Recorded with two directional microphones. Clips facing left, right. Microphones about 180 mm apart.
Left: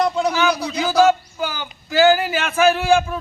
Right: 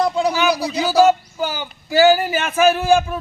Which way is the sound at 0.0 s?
10° right (ahead or behind).